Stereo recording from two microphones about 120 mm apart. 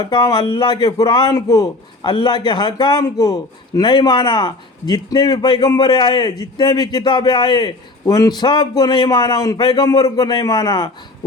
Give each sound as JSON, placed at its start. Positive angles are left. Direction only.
{"t": 0.0, "sound": "speech", "side_deg": 40}